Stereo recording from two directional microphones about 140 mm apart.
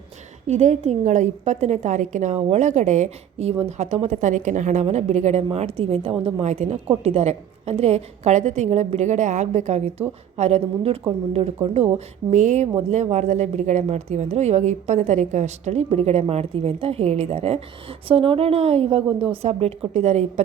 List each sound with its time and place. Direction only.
0.4 s a woman's voice: 55° right (ahead or behind)